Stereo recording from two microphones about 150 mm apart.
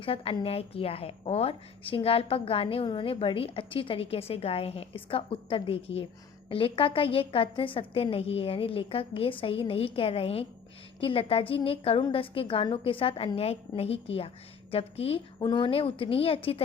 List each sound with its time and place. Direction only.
0.0 s a woman's voice: 40° left (ahead or behind)